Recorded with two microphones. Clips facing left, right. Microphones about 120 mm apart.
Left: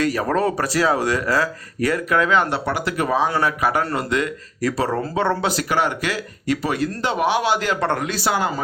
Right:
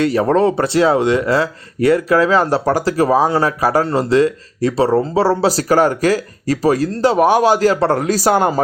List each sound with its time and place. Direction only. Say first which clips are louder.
0.0 s speech: right 6 dB; 25° right (ahead or behind); by 8.6 s 45° right (ahead or behind)